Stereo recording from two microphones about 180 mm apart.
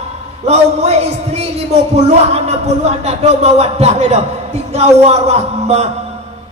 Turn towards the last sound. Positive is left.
turn(degrees=-35)  # may be behind; listen again after turning